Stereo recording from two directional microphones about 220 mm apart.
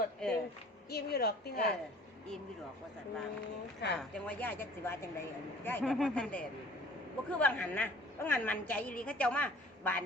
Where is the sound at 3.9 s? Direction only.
5° left (ahead or behind).